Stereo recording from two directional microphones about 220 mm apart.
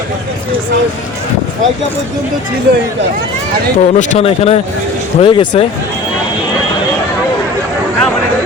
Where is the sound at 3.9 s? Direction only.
30° left (ahead or behind).